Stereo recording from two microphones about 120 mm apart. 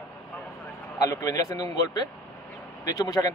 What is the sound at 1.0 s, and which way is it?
Speech, 30° left (ahead or behind).